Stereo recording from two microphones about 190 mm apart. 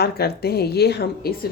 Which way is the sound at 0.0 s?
55° left (ahead or behind).